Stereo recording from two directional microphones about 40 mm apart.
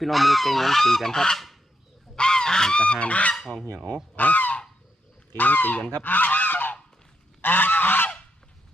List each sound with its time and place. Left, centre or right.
0.0 s goose: centre
2.1 s goose: centre
2.8 s goose: left